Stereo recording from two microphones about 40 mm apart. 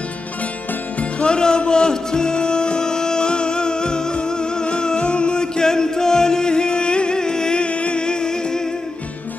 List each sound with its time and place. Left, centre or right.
1.2 s music: centre